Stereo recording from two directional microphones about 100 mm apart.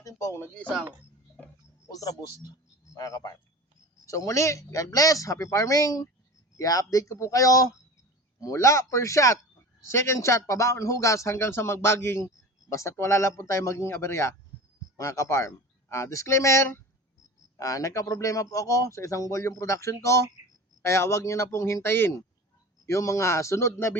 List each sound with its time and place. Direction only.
0.0 s speech: 30° left (ahead or behind)
0.6 s speech: 5° left (ahead or behind)
1.9 s a man's voice: 35° left (ahead or behind)